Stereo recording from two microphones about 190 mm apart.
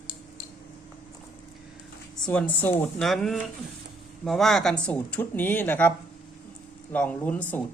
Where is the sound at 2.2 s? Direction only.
5° left (ahead or behind).